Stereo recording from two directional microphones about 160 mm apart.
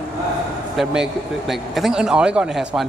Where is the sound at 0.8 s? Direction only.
Centre (ahead or behind).